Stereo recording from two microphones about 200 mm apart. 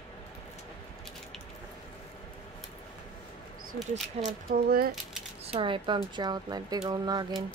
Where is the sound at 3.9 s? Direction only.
35° right (ahead or behind).